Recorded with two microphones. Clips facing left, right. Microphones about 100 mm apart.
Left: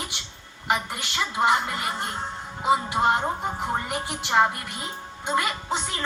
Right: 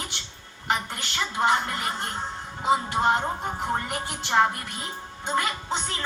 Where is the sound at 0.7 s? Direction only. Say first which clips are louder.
Left 1 dB; 5° left (ahead or behind).